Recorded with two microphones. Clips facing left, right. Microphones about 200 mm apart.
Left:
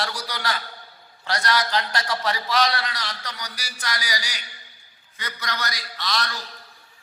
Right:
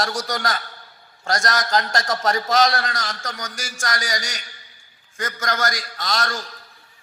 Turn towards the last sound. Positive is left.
turn(degrees=-45)  # may be behind; listen again after turning